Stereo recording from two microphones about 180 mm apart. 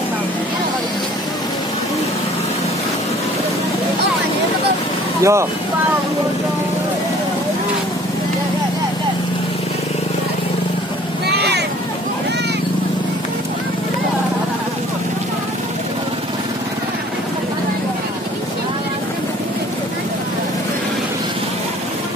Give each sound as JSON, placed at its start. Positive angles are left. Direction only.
{"t": 5.2, "sound": "speech", "side_deg": -15}
{"t": 11.2, "sound": "vehicle", "side_deg": -65}